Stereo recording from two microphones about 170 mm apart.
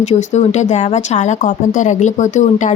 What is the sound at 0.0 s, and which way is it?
Speech, 40° left (ahead or behind).